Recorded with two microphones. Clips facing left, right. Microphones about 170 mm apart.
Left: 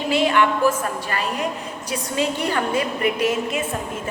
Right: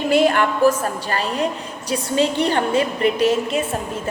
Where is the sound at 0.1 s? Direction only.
45° right (ahead or behind).